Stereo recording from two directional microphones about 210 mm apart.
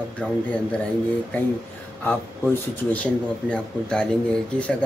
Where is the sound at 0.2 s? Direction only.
5° left (ahead or behind).